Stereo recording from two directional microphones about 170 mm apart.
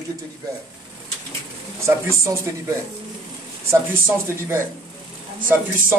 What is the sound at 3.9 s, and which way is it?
Speech, 15° right (ahead or behind).